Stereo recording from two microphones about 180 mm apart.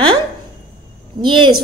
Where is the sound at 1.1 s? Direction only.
25° right (ahead or behind).